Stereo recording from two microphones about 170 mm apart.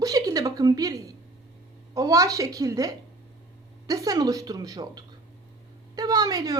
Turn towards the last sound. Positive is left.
turn(degrees=-20)  # may be behind; listen again after turning